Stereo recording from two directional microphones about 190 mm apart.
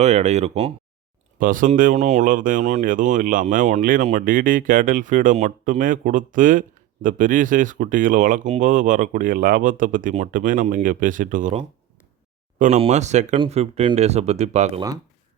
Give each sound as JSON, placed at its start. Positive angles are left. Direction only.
{"t": 0.0, "sound": "speech", "side_deg": -35}
{"t": 1.4, "sound": "speech", "side_deg": -45}